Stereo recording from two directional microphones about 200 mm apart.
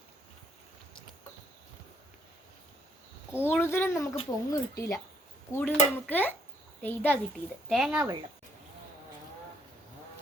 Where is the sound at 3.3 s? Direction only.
10° left (ahead or behind).